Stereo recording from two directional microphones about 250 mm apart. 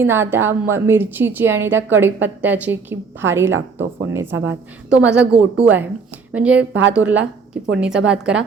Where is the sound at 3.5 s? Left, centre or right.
Right.